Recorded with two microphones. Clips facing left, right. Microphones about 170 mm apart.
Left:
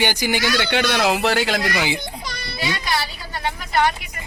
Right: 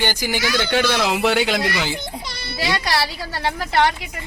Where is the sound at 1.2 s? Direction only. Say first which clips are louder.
Right 1 dB; centre (ahead or behind).